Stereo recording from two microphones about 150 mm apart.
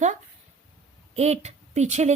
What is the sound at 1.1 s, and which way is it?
Speech, 45° right (ahead or behind).